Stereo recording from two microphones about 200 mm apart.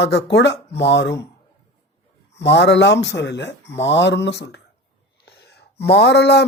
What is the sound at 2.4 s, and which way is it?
Speech, 60° left (ahead or behind).